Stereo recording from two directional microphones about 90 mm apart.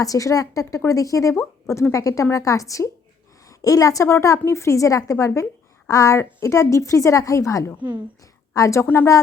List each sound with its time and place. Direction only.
0.0 s a woman's voice: 40° left (ahead or behind)
7.8 s a woman's voice: 20° right (ahead or behind)
8.2 s a sound: 40° left (ahead or behind)